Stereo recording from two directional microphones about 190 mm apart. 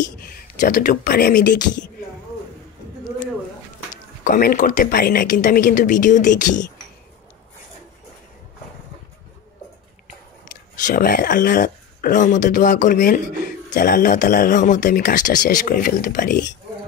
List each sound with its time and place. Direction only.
0.6 s speech: 45° left (ahead or behind)
3.9 s speech: 45° left (ahead or behind)
10.9 s speech: 50° left (ahead or behind)